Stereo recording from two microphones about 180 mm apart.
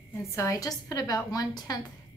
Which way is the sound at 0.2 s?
15° left (ahead or behind).